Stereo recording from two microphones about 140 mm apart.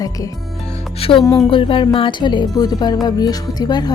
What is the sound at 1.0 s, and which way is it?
A woman's voice, 40° left (ahead or behind).